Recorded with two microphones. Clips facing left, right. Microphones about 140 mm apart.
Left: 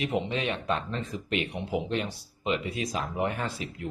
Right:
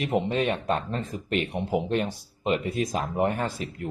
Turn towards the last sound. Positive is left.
turn(degrees=-45)  # may be behind; listen again after turning